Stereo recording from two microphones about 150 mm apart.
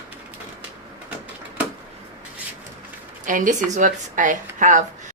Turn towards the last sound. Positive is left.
turn(degrees=-60)  # may be behind; listen again after turning